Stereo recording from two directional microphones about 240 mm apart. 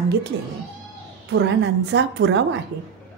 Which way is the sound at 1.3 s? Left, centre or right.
Right.